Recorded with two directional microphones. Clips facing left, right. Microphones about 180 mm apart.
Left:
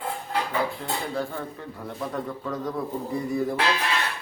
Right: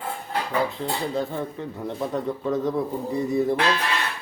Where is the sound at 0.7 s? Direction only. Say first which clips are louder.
Right 3 dB; 20° right (ahead or behind).